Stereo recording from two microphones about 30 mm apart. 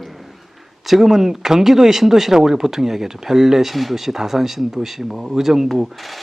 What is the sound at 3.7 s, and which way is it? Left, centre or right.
Speech, centre.